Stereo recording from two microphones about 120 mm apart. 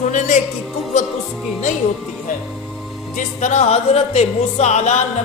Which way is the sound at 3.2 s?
85° left.